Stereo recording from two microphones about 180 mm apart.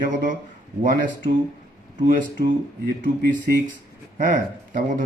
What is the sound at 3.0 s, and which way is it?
A man's voice, 50° right (ahead or behind).